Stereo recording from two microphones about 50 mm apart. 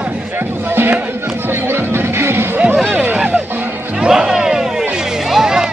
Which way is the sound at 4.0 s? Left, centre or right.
Centre.